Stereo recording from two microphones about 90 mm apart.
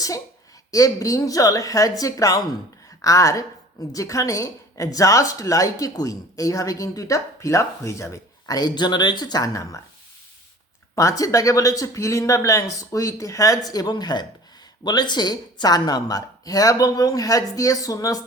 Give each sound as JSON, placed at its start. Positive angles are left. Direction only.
{"t": 0.7, "sound": "speech", "side_deg": 40}
{"t": 8.5, "sound": "a woman's voice", "side_deg": 55}
{"t": 10.9, "sound": "a woman's voice", "side_deg": 40}